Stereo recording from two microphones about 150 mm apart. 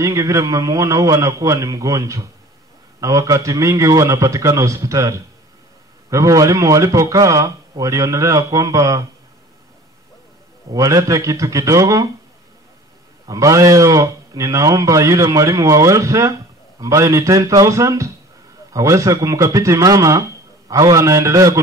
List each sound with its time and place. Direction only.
0.0 s speech: 20° right (ahead or behind)
10.7 s speech: 20° right (ahead or behind)
13.3 s speech: 20° right (ahead or behind)